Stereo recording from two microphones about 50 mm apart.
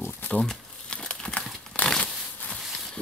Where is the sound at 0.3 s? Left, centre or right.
Centre.